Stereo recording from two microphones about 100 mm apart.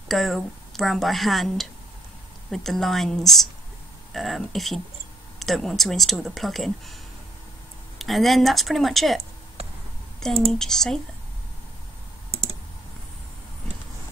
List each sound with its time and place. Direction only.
0.1 s a woman's voice: centre (ahead or behind)
8.0 s a woman's voice: centre (ahead or behind)
10.2 s a woman's voice: 5° left (ahead or behind)
12.3 s clicking: 90° right